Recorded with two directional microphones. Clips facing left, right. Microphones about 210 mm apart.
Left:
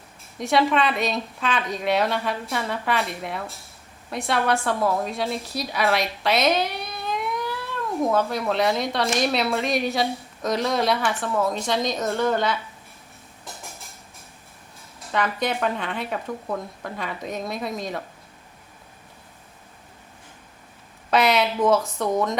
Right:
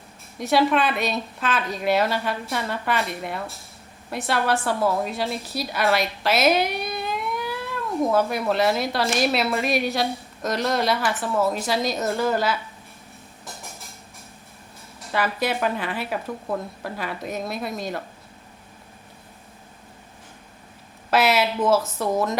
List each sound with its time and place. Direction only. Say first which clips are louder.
0.3 s a woman's voice: right 1 dB; centre (ahead or behind)
15.1 s a woman's voice: even; 5° right (ahead or behind)
21.1 s a woman's voice: even; 5° right (ahead or behind)